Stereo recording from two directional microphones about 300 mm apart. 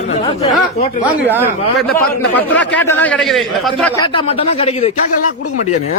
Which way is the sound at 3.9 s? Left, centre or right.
Centre.